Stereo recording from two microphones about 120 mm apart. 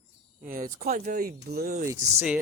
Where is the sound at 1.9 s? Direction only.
25° right (ahead or behind).